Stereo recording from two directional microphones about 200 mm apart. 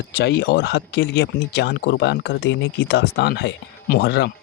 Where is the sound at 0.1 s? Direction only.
55° left (ahead or behind).